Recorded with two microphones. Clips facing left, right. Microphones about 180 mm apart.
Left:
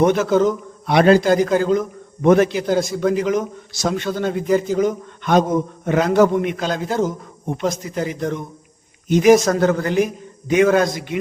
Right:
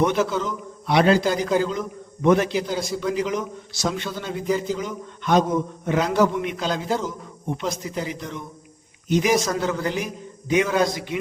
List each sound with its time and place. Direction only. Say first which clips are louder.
0.0 s a man's voice: left 6 dB; 50° left (ahead or behind)